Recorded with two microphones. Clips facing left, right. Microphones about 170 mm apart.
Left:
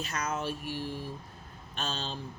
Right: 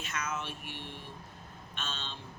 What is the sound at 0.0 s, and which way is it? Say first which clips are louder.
Speech: left 4 dB; 35° left (ahead or behind).